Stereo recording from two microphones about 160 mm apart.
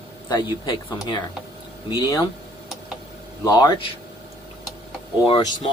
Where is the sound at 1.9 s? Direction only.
25° left (ahead or behind).